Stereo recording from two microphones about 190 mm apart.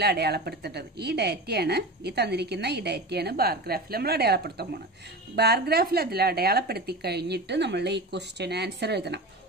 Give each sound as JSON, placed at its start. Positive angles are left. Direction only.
{"t": 0.0, "sound": "a woman's voice", "side_deg": -55}